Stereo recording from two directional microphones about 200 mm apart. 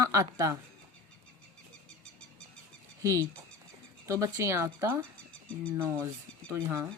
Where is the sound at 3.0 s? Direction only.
15° right (ahead or behind).